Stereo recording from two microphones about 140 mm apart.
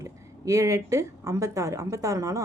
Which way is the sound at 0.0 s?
20° right (ahead or behind).